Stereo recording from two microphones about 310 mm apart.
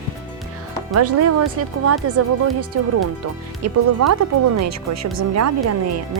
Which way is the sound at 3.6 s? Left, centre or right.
Right.